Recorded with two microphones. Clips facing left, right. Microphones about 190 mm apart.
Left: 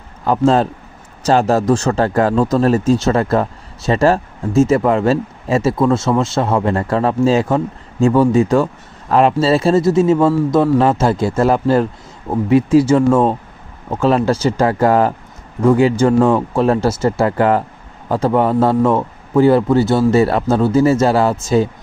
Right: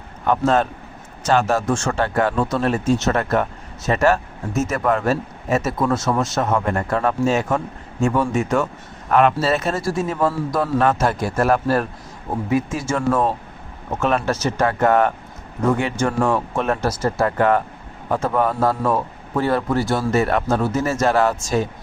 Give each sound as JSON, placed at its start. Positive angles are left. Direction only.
{"t": 0.3, "sound": "a man's voice", "side_deg": 30}